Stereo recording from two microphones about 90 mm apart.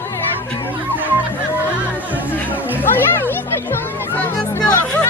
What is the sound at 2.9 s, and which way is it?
Children playing, 25° left (ahead or behind).